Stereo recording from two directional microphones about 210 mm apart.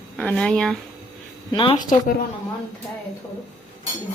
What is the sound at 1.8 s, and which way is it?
Speech, 40° left (ahead or behind).